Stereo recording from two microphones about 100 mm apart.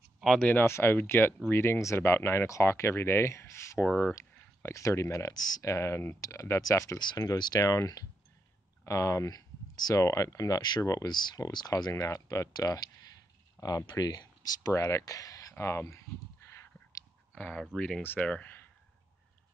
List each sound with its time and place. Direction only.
0.2 s speech: centre (ahead or behind)
0.5 s speech: 20° left (ahead or behind)
3.8 s speech: 10° left (ahead or behind)
4.1 s speech: 25° left (ahead or behind)
7.2 s speech: 40° left (ahead or behind)
7.6 s speech: 35° left (ahead or behind)
11.1 s speech: 45° left (ahead or behind)
14.7 s speech: 30° left (ahead or behind)
17.3 s speech: 10° left (ahead or behind)